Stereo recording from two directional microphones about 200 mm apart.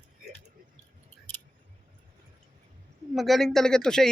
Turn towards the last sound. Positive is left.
turn(degrees=5)  # may be behind; listen again after turning